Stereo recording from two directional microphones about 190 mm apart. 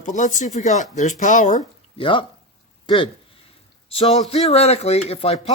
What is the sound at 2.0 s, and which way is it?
A man's voice, 25° left (ahead or behind).